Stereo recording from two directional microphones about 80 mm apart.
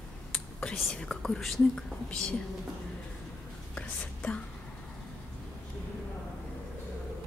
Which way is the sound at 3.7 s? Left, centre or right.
Centre.